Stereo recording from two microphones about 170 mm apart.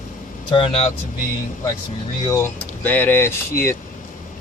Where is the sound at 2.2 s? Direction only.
15° left (ahead or behind).